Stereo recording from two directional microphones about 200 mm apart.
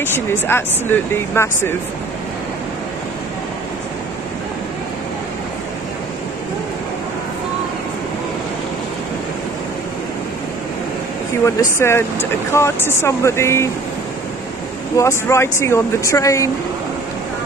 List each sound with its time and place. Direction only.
0.0 s speech: 10° left (ahead or behind)
11.4 s speech: 10° left (ahead or behind)
15.0 s speech: 15° left (ahead or behind)